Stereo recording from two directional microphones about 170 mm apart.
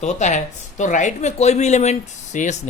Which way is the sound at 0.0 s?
45° left (ahead or behind).